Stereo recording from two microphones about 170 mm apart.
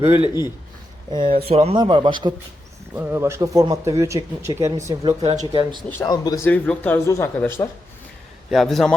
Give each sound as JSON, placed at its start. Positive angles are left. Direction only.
{"t": 1.1, "sound": "a man's voice", "side_deg": -30}
{"t": 2.9, "sound": "speech", "side_deg": -15}
{"t": 5.0, "sound": "speech", "side_deg": -35}
{"t": 5.9, "sound": "speech", "side_deg": 20}
{"t": 8.4, "sound": "a man's voice", "side_deg": 0}